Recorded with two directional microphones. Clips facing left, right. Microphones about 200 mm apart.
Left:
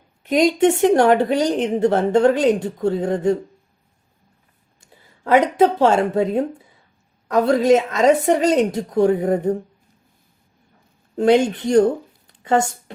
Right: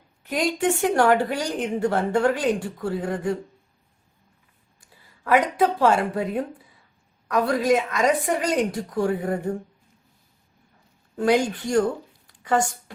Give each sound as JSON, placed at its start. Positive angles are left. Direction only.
{"t": 0.2, "sound": "a woman's voice", "side_deg": 20}
{"t": 4.8, "sound": "a woman's voice", "side_deg": 25}
{"t": 11.2, "sound": "a woman's voice", "side_deg": 25}